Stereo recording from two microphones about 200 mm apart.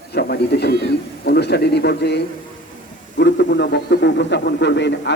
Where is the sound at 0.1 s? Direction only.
55° left (ahead or behind).